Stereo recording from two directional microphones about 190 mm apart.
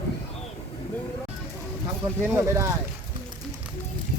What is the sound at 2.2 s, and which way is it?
Speech, 15° right (ahead or behind).